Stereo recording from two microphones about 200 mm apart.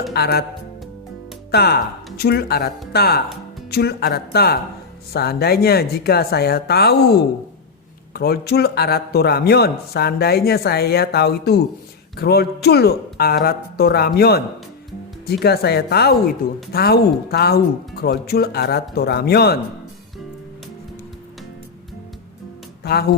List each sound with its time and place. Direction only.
0.1 s a man's voice: 50° left (ahead or behind)
1.5 s a man's voice: 55° left (ahead or behind)
22.8 s speech: 50° left (ahead or behind)